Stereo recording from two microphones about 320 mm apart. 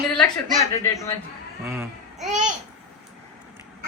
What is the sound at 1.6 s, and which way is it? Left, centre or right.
Speech, centre.